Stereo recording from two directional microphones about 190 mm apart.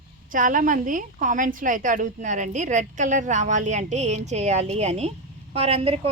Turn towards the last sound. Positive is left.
turn(degrees=-30)  # may be behind; listen again after turning